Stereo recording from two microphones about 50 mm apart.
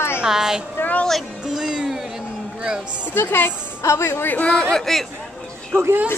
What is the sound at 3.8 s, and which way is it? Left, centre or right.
Speech, left.